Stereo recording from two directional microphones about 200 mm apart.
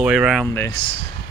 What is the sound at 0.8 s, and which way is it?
Speech, 25° left (ahead or behind).